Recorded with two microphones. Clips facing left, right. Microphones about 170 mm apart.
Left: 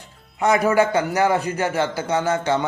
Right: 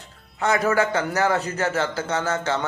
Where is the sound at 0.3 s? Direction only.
15° left (ahead or behind).